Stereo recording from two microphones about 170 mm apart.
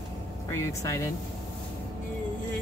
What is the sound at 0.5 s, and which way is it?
Speech, 15° left (ahead or behind).